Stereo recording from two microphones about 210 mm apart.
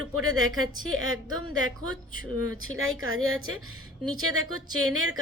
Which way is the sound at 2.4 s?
85° right.